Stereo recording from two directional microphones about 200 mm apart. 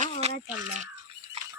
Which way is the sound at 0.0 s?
30° right (ahead or behind).